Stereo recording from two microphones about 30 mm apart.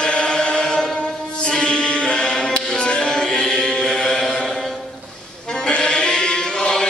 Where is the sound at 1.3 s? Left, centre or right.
Left.